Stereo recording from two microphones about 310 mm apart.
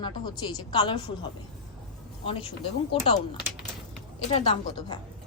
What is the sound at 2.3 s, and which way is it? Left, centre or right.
Speech, centre.